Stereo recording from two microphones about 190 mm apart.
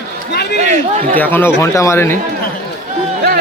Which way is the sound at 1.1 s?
10° left (ahead or behind).